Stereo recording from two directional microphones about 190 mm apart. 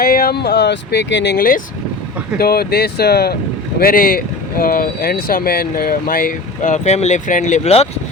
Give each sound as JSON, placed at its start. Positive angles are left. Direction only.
{"t": 0.0, "sound": "speech", "side_deg": 50}